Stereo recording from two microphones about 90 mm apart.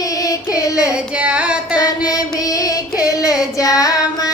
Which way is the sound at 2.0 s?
40° left (ahead or behind).